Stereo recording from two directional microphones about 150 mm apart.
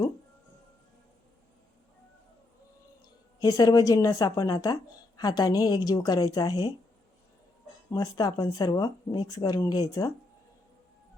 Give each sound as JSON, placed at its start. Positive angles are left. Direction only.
{"t": 3.4, "sound": "a woman's voice", "side_deg": 25}
{"t": 7.9, "sound": "a woman's voice", "side_deg": 25}